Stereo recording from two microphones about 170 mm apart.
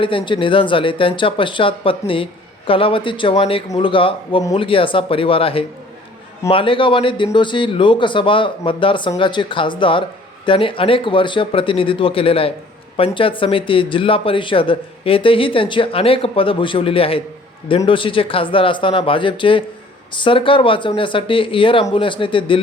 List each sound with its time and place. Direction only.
0.0 s a man's voice: 30° left (ahead or behind)